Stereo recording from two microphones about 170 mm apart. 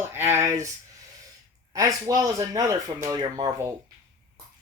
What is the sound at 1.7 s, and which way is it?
Speech, 20° right (ahead or behind).